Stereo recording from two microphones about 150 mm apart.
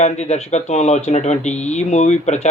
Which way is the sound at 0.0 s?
45° left (ahead or behind).